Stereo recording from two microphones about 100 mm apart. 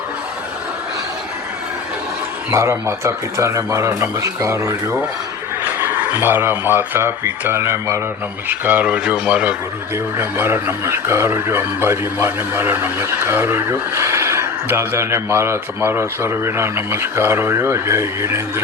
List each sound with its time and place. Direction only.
2.5 s speech: 30° right (ahead or behind)
6.1 s speech: 25° right (ahead or behind)